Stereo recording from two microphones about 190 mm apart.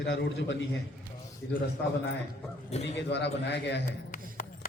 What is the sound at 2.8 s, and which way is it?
A man's voice, 65° left (ahead or behind).